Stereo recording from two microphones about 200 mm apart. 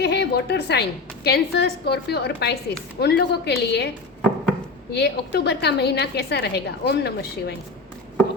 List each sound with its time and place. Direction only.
0.0 s a woman's voice: 55° left (ahead or behind)